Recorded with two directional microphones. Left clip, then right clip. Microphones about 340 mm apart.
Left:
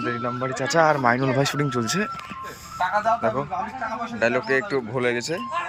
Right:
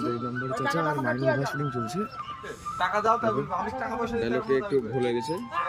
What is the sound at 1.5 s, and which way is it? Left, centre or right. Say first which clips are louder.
Speech: left 6 dB; centre.